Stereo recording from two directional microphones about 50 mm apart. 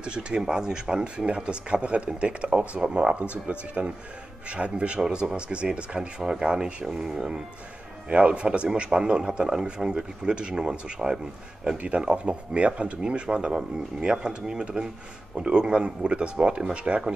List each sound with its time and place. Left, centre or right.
0.0 s a man's voice: centre